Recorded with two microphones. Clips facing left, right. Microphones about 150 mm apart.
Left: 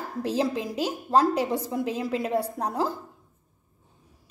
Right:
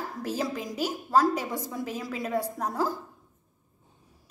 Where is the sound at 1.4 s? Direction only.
30° left (ahead or behind).